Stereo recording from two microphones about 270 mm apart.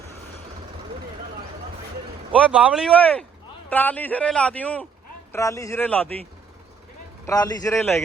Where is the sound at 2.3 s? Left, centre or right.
Centre.